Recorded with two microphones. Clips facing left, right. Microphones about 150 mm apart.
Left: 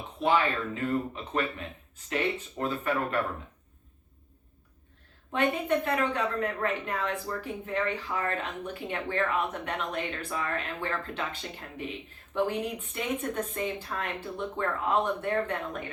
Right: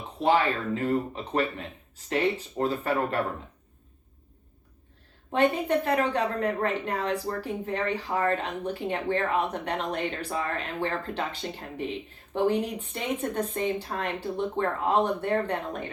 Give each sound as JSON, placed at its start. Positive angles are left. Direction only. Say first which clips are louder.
{"t": 0.2, "sound": "a woman's voice", "louder": "right 2 dB", "side_deg": -35}
{"t": 5.3, "sound": "a woman's voice", "louder": "right 3 dB", "side_deg": -35}